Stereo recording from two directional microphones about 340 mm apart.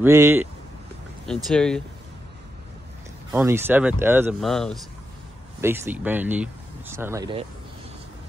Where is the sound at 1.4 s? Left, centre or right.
Centre.